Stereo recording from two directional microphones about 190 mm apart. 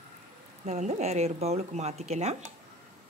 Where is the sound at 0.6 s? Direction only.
35° right (ahead or behind).